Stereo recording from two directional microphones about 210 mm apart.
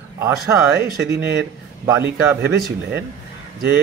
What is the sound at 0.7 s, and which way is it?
Speech, 50° right (ahead or behind).